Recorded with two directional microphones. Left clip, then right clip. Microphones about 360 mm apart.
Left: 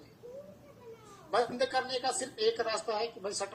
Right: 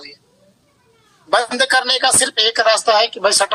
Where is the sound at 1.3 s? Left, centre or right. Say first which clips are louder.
Right 15 dB; right.